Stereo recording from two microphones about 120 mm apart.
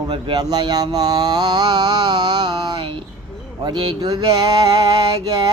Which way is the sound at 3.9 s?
30° right (ahead or behind).